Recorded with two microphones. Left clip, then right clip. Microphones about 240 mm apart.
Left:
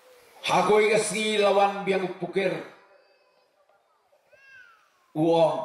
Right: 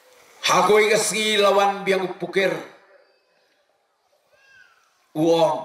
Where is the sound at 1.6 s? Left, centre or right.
Centre.